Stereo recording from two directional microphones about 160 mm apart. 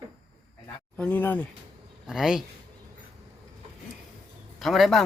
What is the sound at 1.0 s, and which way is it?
Speech, 10° left (ahead or behind).